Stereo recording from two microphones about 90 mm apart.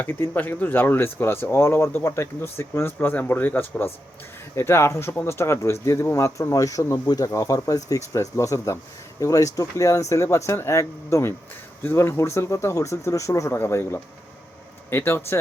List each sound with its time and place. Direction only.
0.0 s speech: 25° left (ahead or behind)